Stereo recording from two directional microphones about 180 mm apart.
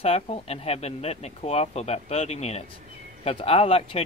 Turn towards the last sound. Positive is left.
turn(degrees=35)  # may be behind; listen again after turning